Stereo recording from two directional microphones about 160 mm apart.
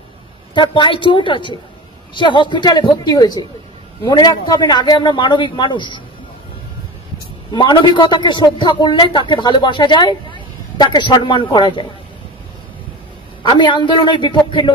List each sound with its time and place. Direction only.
0.6 s a woman's voice: 30° left (ahead or behind)
7.5 s speech: 30° left (ahead or behind)
13.4 s a woman's voice: 30° left (ahead or behind)